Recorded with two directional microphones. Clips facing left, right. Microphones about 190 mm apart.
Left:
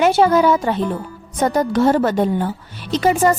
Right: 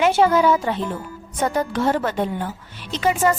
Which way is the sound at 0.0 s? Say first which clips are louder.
Left 3 dB; 40° left (ahead or behind).